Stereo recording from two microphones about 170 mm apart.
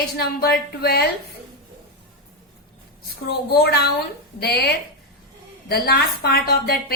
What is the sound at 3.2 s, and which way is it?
A woman's voice, 70° left (ahead or behind).